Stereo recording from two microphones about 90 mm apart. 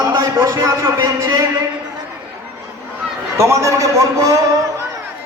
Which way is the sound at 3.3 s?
35° right (ahead or behind).